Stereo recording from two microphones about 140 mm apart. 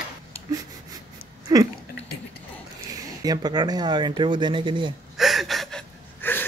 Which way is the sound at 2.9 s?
25° right (ahead or behind).